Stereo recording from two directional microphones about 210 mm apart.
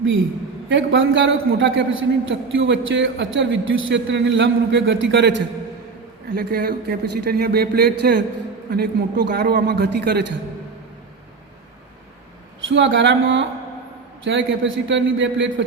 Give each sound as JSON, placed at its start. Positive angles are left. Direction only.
{"t": 0.7, "sound": "a man's voice", "side_deg": -60}
{"t": 6.3, "sound": "speech", "side_deg": -45}
{"t": 12.6, "sound": "a man's voice", "side_deg": -60}